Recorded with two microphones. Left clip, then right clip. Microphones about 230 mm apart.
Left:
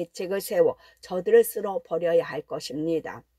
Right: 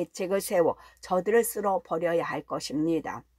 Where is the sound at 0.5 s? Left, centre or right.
Left.